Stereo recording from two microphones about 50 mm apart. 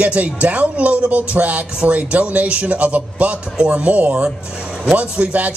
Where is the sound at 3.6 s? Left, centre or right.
Centre.